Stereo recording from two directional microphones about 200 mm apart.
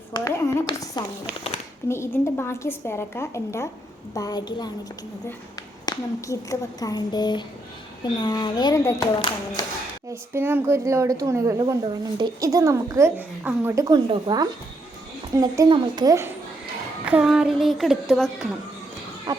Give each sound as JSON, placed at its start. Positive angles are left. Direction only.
{"t": 0.1, "sound": "a sound", "side_deg": 15}
{"t": 0.6, "sound": "a woman's voice", "side_deg": 20}
{"t": 5.8, "sound": "speech", "side_deg": 15}
{"t": 10.1, "sound": "speech", "side_deg": -10}
{"t": 17.1, "sound": "a woman's voice", "side_deg": -5}